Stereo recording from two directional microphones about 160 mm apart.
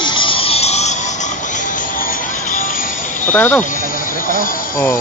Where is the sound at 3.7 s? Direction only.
60° left (ahead or behind).